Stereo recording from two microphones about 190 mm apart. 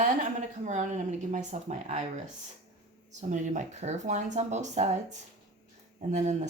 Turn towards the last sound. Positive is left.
turn(degrees=-40)  # may be behind; listen again after turning